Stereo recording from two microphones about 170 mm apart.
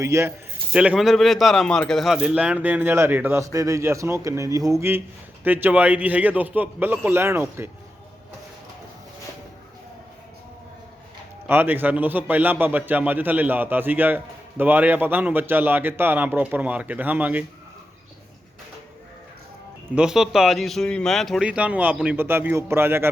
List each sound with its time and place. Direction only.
0.0 s speech: 15° right (ahead or behind)
0.7 s speech: 5° right (ahead or behind)
11.4 s speech: 10° right (ahead or behind)
20.0 s speech: 5° right (ahead or behind)